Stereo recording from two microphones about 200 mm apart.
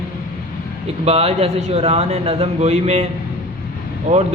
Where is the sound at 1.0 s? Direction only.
30° right (ahead or behind).